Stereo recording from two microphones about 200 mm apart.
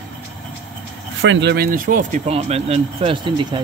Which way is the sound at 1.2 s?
65° right (ahead or behind).